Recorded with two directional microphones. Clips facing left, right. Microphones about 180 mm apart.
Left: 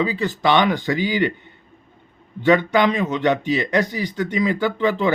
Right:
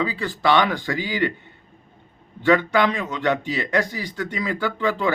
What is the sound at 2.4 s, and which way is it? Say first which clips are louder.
A man's voice: left 2 dB; 20° left (ahead or behind).